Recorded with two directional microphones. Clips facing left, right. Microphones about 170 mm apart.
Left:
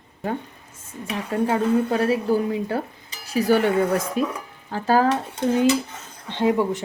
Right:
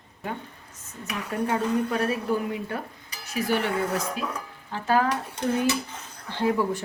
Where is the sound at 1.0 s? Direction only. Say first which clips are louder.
Left 5 dB; 25° left (ahead or behind).